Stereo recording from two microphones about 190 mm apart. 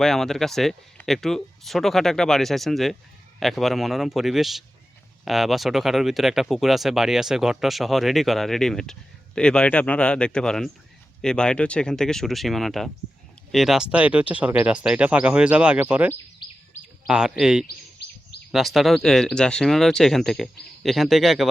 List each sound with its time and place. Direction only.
0.0 s speech: centre (ahead or behind)
16.4 s bird: 25° left (ahead or behind)
17.1 s speech: 5° right (ahead or behind)